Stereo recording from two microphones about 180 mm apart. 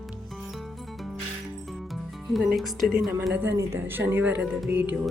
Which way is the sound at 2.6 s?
Centre (ahead or behind).